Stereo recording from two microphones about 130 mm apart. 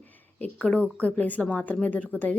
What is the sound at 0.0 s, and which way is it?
A woman's voice, 15° left (ahead or behind).